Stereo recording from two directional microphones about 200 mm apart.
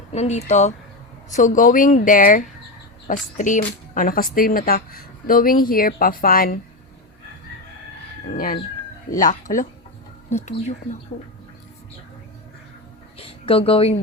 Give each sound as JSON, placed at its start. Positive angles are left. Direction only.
{"t": 0.1, "sound": "a woman's voice", "side_deg": 35}
{"t": 9.0, "sound": "a woman's voice", "side_deg": 40}
{"t": 13.1, "sound": "a sound", "side_deg": 30}